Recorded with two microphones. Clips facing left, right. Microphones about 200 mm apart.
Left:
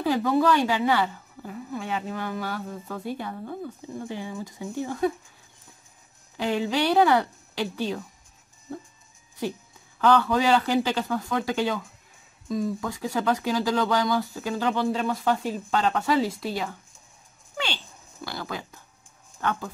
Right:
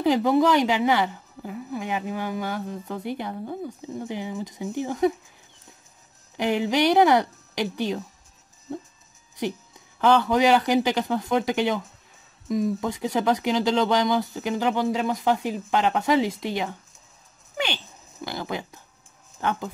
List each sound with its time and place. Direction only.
0.0 s a woman's voice: 20° right (ahead or behind)
6.3 s a woman's voice: 15° right (ahead or behind)
9.4 s a woman's voice: 20° right (ahead or behind)
18.2 s a woman's voice: 20° right (ahead or behind)